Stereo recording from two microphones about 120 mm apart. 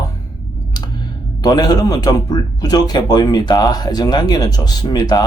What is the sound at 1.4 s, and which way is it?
Speech, 35° left (ahead or behind).